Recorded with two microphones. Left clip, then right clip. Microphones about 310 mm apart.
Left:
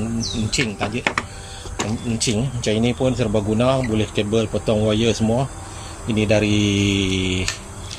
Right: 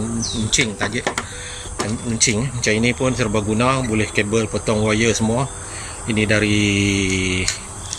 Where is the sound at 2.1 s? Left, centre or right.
Centre.